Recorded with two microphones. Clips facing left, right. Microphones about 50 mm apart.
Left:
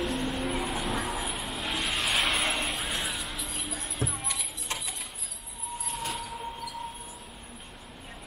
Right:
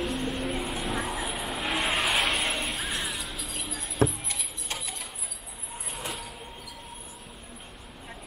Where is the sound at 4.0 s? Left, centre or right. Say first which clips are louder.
Right 9 dB; right.